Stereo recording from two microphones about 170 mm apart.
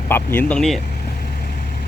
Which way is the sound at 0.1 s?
10° left (ahead or behind).